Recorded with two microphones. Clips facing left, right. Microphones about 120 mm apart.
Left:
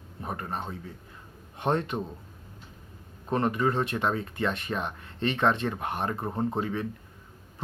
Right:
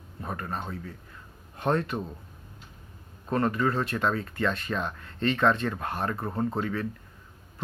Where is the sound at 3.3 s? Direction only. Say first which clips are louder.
Even; 20° left (ahead or behind).